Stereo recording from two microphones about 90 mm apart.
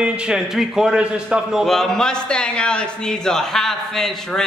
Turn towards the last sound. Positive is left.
turn(degrees=5)  # may be behind; listen again after turning